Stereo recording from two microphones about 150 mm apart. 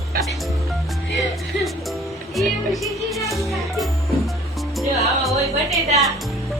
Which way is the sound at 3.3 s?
Centre (ahead or behind).